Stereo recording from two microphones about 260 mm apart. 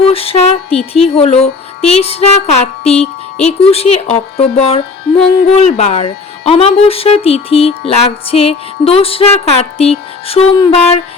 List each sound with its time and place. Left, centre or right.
0.0 s speech: left